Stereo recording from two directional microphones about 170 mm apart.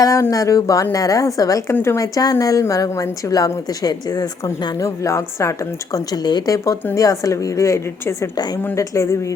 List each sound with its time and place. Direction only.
0.0 s a woman's voice: 20° left (ahead or behind)